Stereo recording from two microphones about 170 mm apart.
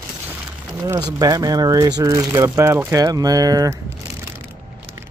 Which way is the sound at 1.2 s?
20° right (ahead or behind).